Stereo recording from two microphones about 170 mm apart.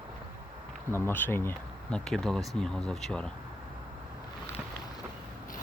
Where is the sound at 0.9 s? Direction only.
10° left (ahead or behind).